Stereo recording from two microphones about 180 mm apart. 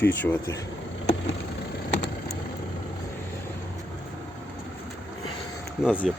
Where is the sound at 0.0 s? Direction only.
10° left (ahead or behind).